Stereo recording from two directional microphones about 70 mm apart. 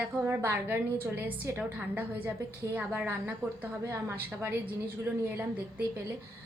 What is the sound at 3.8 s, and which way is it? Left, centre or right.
Speech, right.